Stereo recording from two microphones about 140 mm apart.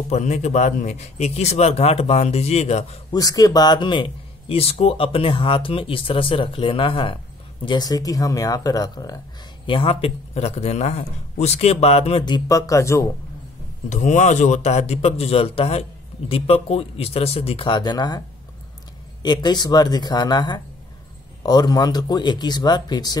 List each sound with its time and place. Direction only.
0.1 s speech: 55° left (ahead or behind)
3.1 s a man's voice: 25° left (ahead or behind)
9.7 s speech: 40° left (ahead or behind)
12.4 s speech: 25° left (ahead or behind)
13.8 s speech: 60° left (ahead or behind); by 18.2 s 30° left (ahead or behind)
19.2 s a man's voice: 30° left (ahead or behind)